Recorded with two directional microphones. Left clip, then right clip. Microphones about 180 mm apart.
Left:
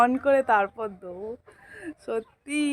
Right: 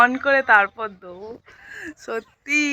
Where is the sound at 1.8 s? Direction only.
Centre (ahead or behind).